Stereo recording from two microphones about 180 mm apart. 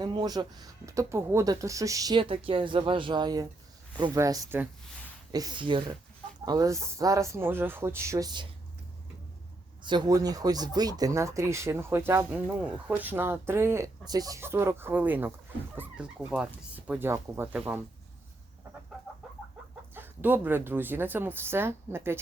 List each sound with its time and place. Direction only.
0.0 s speech: 25° right (ahead or behind)
5.3 s speech: 20° right (ahead or behind)
9.8 s speech: 25° right (ahead or behind)
19.9 s speech: 10° right (ahead or behind)